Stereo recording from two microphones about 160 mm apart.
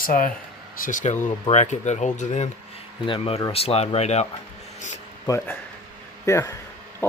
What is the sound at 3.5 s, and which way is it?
Speech, 40° left (ahead or behind).